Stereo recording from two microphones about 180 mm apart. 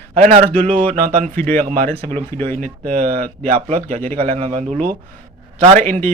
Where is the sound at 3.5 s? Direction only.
35° right (ahead or behind).